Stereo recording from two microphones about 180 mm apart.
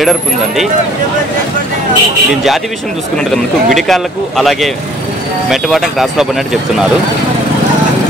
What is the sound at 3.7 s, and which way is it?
Speech, centre (ahead or behind).